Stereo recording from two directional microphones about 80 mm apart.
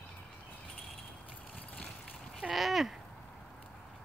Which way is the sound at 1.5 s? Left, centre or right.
Centre.